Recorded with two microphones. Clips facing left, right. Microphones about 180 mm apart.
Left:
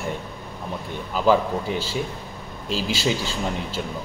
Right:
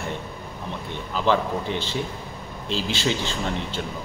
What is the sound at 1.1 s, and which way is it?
Speech, 10° left (ahead or behind).